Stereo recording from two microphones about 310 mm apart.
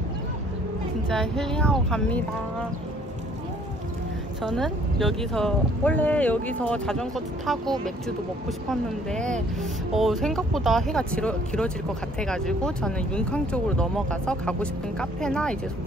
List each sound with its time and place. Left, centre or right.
1.0 s speech: centre
4.6 s speech: centre